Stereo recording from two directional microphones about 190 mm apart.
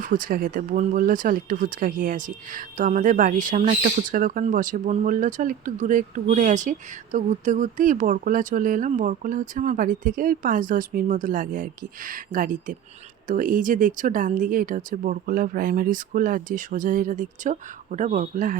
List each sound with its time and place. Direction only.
0.0 s speech: 45° right (ahead or behind)